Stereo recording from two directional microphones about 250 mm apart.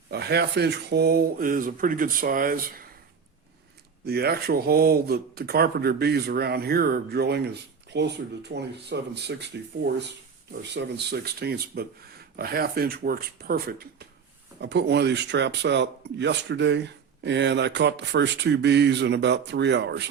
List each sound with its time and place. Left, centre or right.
0.1 s speech: right
4.0 s speech: right